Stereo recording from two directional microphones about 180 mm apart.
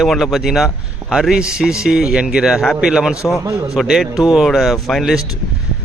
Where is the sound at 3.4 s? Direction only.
20° right (ahead or behind).